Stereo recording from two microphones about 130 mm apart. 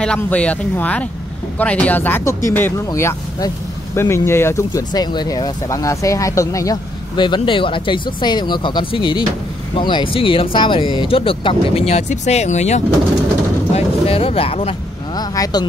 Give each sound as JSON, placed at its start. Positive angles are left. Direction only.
{"t": 0.0, "sound": "speech", "side_deg": 10}
{"t": 7.2, "sound": "speech", "side_deg": 40}
{"t": 13.7, "sound": "speech", "side_deg": 50}
{"t": 15.1, "sound": "speech", "side_deg": 30}